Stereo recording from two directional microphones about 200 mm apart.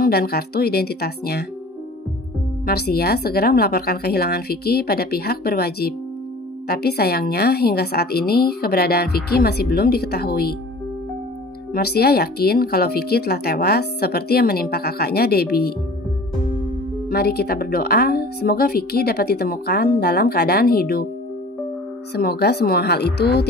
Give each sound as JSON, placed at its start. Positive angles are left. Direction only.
{"t": 0.0, "sound": "speech", "side_deg": 50}
{"t": 2.6, "sound": "speech", "side_deg": 50}
{"t": 11.7, "sound": "speech", "side_deg": 50}
{"t": 17.1, "sound": "speech", "side_deg": 50}
{"t": 22.1, "sound": "speech", "side_deg": 50}